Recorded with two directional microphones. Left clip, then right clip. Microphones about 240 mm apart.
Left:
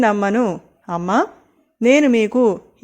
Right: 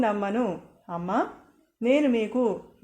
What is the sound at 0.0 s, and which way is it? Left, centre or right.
Speech, left.